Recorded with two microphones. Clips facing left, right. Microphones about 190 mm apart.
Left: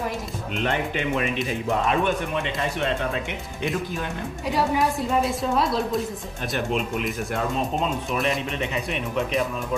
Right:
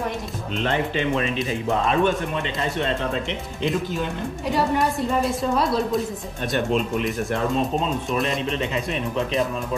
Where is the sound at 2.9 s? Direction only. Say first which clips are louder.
Right 1 dB; 5° left (ahead or behind).